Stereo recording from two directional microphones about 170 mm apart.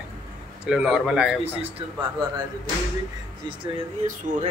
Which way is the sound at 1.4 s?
35° right (ahead or behind).